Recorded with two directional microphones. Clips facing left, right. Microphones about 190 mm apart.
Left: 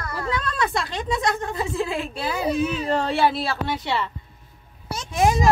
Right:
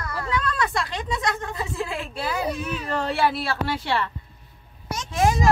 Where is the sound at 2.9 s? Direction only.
25° left (ahead or behind).